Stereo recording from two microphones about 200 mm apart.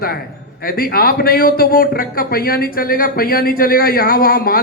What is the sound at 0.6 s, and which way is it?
Speech, 45° left (ahead or behind).